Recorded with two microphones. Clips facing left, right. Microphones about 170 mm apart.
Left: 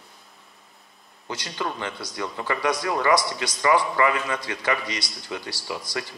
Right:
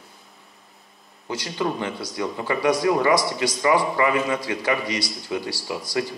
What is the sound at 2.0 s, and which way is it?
Speech, 20° right (ahead or behind).